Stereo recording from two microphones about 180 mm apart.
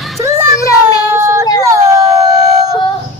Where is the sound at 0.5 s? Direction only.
20° left (ahead or behind).